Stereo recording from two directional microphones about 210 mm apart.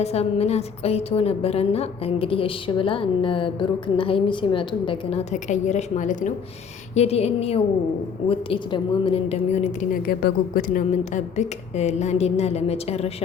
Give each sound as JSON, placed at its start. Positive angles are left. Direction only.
{"t": 0.0, "sound": "a woman's voice", "side_deg": 30}
{"t": 9.9, "sound": "a woman's voice", "side_deg": 45}